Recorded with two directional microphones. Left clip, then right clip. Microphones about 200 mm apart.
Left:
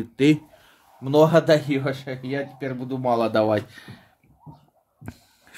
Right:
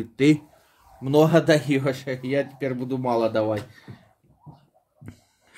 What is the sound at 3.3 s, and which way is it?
Speech, 60° left (ahead or behind).